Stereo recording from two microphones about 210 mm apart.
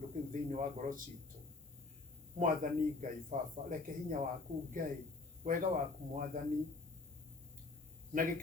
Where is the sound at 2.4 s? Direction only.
40° right (ahead or behind).